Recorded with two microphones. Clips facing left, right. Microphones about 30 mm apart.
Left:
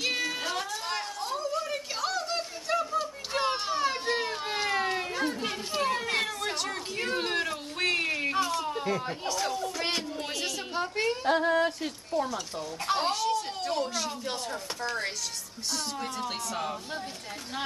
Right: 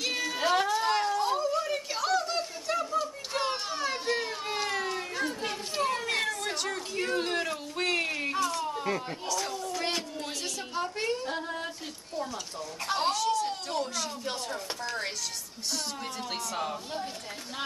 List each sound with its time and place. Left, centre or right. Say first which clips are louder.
0.0 s music: left 2 dB; centre
0.4 s a sound: right 7 dB; centre
5.4 s children playing: left 1 dB; centre
8.4 s a sound: left 1 dB; centre
11.2 s yodeling: left 10 dB; left
12.8 s a woman's voice: even; centre